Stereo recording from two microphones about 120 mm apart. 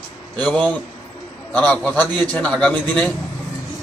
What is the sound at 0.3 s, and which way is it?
Speech, 10° left (ahead or behind).